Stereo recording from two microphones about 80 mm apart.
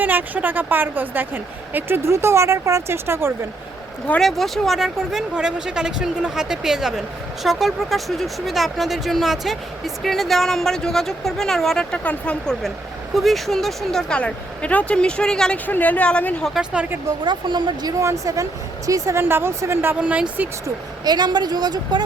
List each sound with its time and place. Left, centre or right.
0.0 s a woman's voice: right
2.0 s speech: right
4.2 s speech: centre
13.1 s speech: centre
14.2 s speech: centre
15.5 s a woman's voice: left
17.2 s speech: right
18.0 s a woman's voice: right
19.2 s a woman's voice: right
20.0 s speech: centre
21.0 s a woman's voice: right